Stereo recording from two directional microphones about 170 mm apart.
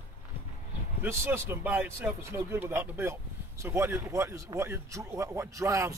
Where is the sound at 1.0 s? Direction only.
15° right (ahead or behind).